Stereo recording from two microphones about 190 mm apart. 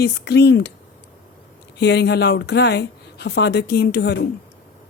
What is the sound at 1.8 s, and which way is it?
A woman's voice, 65° left (ahead or behind).